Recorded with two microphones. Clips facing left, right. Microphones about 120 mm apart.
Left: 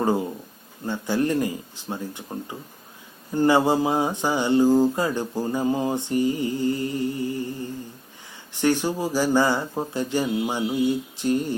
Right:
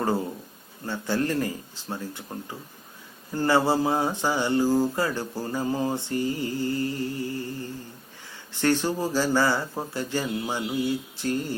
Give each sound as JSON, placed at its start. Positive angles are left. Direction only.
{"t": 0.0, "sound": "speech", "side_deg": 15}
{"t": 0.9, "sound": "mantra", "side_deg": 15}